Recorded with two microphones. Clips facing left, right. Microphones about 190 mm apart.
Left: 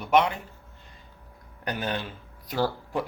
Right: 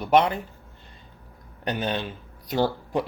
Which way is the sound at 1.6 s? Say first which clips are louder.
Right 3 dB; 20° right (ahead or behind).